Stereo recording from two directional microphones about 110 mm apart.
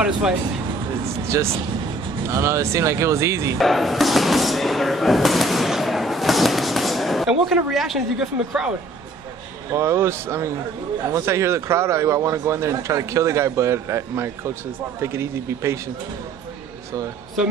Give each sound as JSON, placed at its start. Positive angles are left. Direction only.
{"t": 1.3, "sound": "speech", "side_deg": -25}
{"t": 3.5, "sound": "speech", "side_deg": 0}
{"t": 9.7, "sound": "speech", "side_deg": -25}